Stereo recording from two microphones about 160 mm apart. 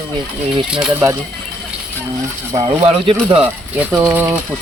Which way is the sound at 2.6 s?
35° right (ahead or behind).